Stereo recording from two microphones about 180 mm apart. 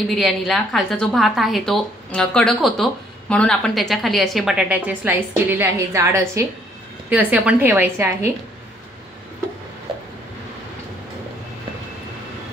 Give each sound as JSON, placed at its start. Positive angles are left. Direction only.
{"t": 0.1, "sound": "a woman's voice", "side_deg": 0}